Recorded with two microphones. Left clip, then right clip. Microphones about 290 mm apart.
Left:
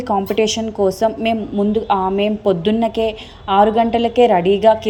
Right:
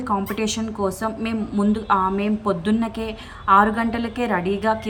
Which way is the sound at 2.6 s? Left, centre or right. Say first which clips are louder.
Left 8 dB; centre.